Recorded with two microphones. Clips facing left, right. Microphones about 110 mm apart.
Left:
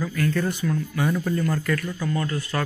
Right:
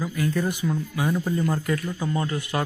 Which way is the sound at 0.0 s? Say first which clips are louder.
Left 1 dB; 10° right (ahead or behind).